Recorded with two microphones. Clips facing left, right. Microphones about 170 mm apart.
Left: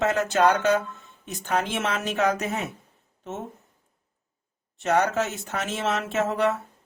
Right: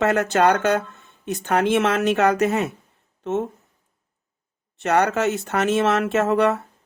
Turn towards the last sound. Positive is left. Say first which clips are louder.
# right 5 dB
turn(degrees=-65)  # may be behind; listen again after turning